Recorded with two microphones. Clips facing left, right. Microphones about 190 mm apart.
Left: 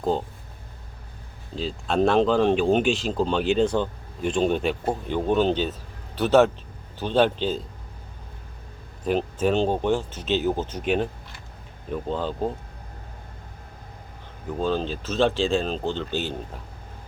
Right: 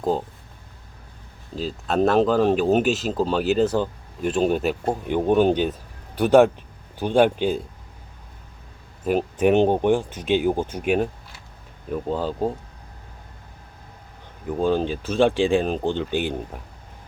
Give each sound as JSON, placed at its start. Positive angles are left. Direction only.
{"t": 0.0, "sound": "speech", "side_deg": -5}
{"t": 1.5, "sound": "speech", "side_deg": -5}
{"t": 9.0, "sound": "speech", "side_deg": -10}
{"t": 14.6, "sound": "speech", "side_deg": -15}